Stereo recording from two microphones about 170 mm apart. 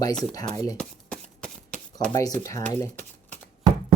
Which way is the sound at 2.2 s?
20° left (ahead or behind).